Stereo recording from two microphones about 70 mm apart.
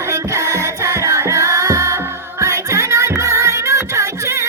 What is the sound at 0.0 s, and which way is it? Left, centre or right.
Music, right.